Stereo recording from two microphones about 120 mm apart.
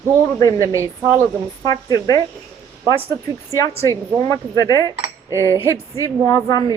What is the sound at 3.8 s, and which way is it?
A woman's voice, 30° left (ahead or behind).